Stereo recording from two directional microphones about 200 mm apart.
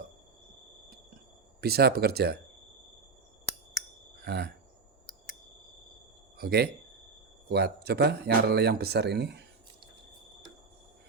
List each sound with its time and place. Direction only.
1.6 s speech: 50° right (ahead or behind)
4.2 s chime: 50° right (ahead or behind)
6.3 s speech: 50° right (ahead or behind)